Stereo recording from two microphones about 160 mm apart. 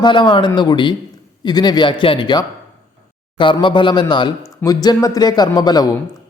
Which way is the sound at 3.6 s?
30° left (ahead or behind).